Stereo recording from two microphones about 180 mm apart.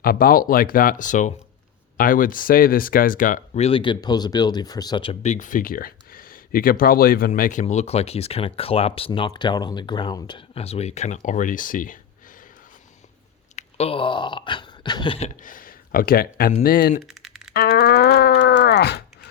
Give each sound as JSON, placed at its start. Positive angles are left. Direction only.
{"t": 0.0, "sound": "speech", "side_deg": 55}
{"t": 5.2, "sound": "speech", "side_deg": 45}
{"t": 13.6, "sound": "a sound", "side_deg": 35}
{"t": 15.4, "sound": "speech", "side_deg": 50}
{"t": 17.0, "sound": "typing", "side_deg": 0}
{"t": 17.5, "sound": "a sound", "side_deg": 55}